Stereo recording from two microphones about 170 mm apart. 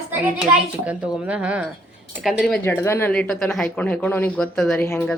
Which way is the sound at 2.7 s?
15° left (ahead or behind).